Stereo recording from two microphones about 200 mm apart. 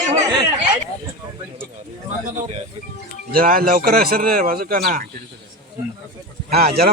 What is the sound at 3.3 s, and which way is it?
Speech, 45° right (ahead or behind).